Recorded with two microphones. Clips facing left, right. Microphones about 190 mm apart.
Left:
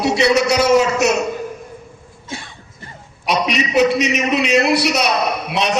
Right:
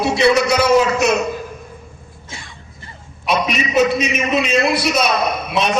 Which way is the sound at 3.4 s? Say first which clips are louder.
Left 1 dB; 65° left (ahead or behind).